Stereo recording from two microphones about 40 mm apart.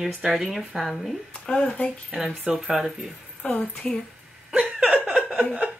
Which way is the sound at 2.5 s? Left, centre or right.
Centre.